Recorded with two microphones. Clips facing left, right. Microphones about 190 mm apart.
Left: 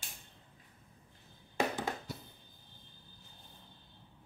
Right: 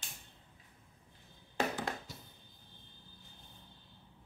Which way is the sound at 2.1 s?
60° left (ahead or behind).